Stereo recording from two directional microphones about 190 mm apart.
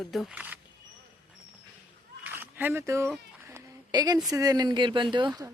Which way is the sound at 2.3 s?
10° right (ahead or behind).